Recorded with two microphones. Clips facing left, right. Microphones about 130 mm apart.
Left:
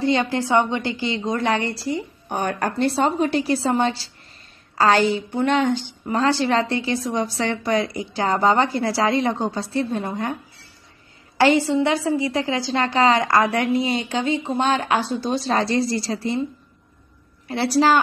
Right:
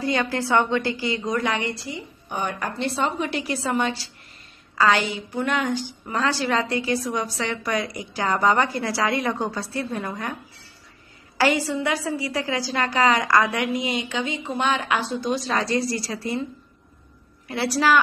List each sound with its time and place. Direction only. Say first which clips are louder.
0.0 s a woman's voice: left 4 dB; 25° left (ahead or behind)
11.3 s a woman's voice: left 5 dB; 25° left (ahead or behind)
17.5 s a woman's voice: left 4 dB; 30° left (ahead or behind)